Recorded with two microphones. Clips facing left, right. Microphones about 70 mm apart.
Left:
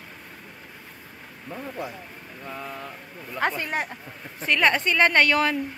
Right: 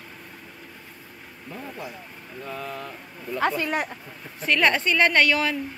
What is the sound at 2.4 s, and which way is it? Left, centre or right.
A woman's voice, centre.